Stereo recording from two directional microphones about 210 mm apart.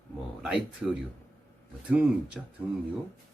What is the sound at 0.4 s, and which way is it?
Speech, 5° right (ahead or behind).